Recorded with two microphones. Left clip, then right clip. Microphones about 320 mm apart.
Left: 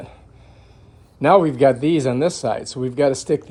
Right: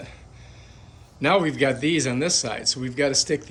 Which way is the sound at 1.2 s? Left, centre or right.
Centre.